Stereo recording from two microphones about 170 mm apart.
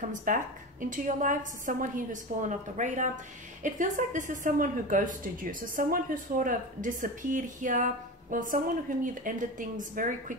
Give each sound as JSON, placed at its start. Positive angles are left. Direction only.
{"t": 0.1, "sound": "a woman's voice", "side_deg": -50}